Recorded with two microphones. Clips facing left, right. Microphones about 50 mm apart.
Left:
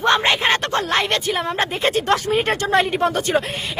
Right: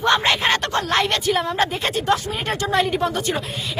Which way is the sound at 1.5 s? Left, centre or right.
Left.